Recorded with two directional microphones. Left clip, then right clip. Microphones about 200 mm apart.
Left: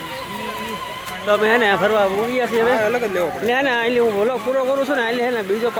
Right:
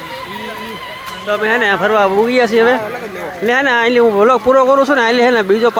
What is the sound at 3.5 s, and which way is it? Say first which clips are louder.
Speech: right 8 dB; 10° right (ahead or behind).